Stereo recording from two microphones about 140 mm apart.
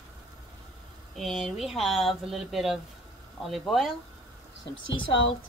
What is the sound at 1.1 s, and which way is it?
Speech, centre (ahead or behind).